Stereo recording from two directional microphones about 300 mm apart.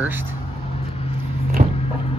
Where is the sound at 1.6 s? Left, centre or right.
Right.